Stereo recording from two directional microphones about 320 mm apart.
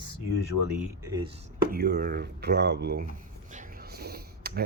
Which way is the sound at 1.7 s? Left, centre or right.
Right.